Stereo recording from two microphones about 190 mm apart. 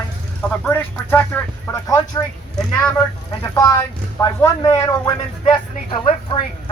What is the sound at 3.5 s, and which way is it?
Speech, 15° left (ahead or behind).